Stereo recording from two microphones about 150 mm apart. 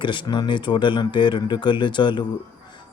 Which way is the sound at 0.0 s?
30° left (ahead or behind).